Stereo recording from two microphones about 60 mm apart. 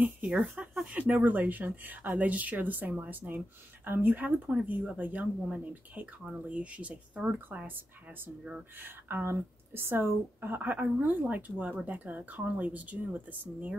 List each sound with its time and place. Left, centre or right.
0.0 s speech: right
0.4 s speech: centre
0.8 s a woman's voice: right
7.3 s a woman's voice: right